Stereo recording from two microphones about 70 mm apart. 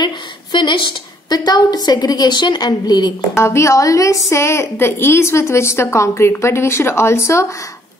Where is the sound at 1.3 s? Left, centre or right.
Left.